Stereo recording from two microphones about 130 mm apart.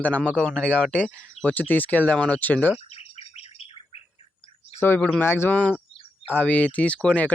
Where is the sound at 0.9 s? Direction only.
10° left (ahead or behind).